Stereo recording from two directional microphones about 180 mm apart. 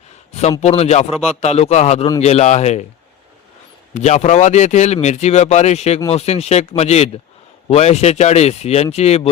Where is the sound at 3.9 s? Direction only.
40° left (ahead or behind).